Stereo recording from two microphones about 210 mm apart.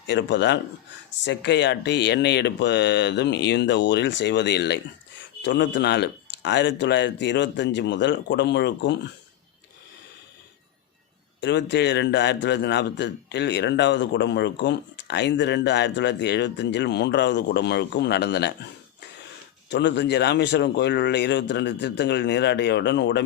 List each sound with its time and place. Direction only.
0.1 s a man's voice: 55° left (ahead or behind)
11.3 s a man's voice: 55° left (ahead or behind)